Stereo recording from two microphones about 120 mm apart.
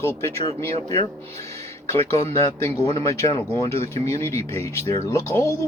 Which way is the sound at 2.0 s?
60° right (ahead or behind).